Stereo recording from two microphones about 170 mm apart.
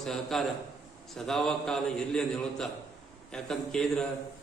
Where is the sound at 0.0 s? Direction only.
Centre (ahead or behind).